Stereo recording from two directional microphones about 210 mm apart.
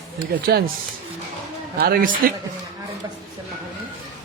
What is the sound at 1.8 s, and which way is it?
Speech, 45° right (ahead or behind).